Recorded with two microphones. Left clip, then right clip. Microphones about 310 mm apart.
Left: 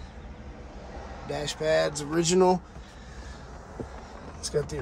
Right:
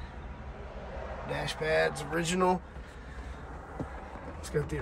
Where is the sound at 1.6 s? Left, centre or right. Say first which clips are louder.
Left 4 dB; centre.